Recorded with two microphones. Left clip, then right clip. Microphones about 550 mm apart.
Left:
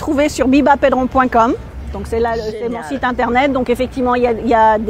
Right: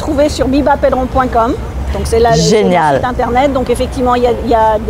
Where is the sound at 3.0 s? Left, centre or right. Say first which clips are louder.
Right 3 dB; left.